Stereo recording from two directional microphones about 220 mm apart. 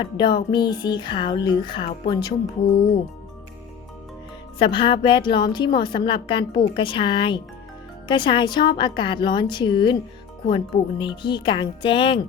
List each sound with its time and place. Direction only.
0.0 s a woman's voice: 20° left (ahead or behind)
4.5 s a woman's voice: 20° left (ahead or behind)